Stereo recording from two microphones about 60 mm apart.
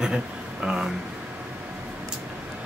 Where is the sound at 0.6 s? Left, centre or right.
Centre.